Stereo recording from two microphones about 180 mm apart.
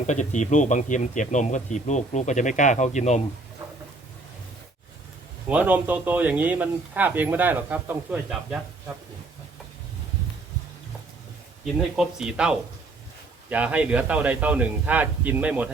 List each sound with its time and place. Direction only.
0.1 s speech: 40° left (ahead or behind)
5.5 s speech: 10° right (ahead or behind)
11.6 s speech: centre (ahead or behind)